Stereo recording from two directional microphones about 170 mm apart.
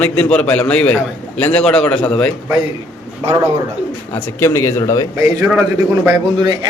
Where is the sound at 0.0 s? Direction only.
5° left (ahead or behind).